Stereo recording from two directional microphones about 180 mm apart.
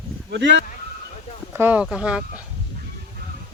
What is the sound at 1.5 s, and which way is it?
Speech, 10° right (ahead or behind).